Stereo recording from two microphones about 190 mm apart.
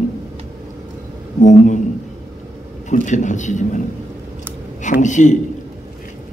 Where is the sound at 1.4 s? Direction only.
40° left (ahead or behind).